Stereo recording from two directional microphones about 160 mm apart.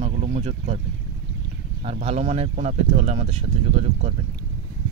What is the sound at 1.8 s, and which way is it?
Speech, 40° right (ahead or behind).